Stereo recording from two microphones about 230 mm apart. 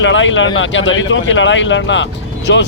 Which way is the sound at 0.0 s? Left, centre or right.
Left.